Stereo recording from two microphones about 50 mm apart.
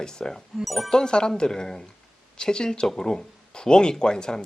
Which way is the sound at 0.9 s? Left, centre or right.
Centre.